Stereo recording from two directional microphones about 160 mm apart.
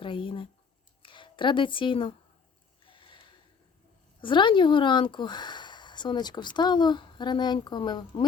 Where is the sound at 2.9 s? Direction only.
30° left (ahead or behind).